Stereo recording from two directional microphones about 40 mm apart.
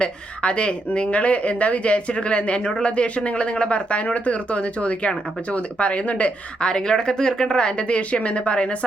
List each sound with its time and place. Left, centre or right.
0.0 s speech: left
6.6 s speech: centre